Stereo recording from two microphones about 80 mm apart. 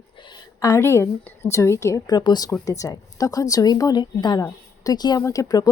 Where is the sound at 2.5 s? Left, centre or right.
Left.